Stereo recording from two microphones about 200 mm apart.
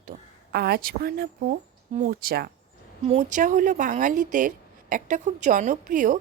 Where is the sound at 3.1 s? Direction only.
35° right (ahead or behind).